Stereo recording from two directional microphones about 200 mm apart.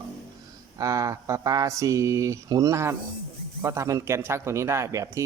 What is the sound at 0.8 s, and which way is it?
Speech, 15° right (ahead or behind).